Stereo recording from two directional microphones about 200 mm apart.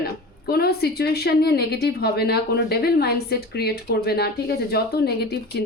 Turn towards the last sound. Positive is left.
turn(degrees=55)  # may be behind; listen again after turning